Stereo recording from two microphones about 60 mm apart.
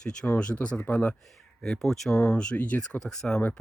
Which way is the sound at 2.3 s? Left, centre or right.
Centre.